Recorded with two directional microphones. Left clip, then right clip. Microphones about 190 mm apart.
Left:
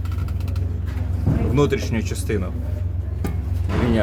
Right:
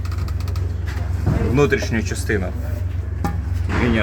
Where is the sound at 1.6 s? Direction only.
5° right (ahead or behind).